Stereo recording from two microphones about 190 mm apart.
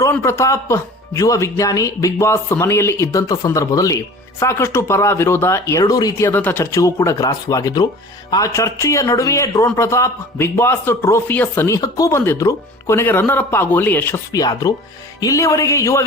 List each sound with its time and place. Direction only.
0.0 s speech: 15° left (ahead or behind)